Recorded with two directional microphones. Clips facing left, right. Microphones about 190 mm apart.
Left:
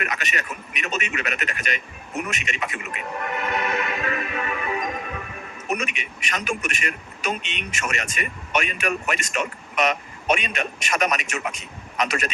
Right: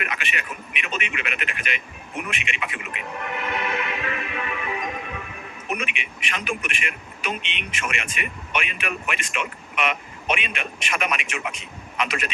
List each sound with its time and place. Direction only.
0.0 s a man's voice: 40° left (ahead or behind)